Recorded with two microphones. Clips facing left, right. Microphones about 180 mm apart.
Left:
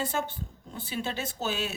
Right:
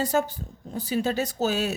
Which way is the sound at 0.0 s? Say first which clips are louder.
Right 7 dB; 40° right (ahead or behind).